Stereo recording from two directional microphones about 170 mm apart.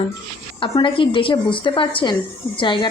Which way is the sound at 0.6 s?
30° left (ahead or behind).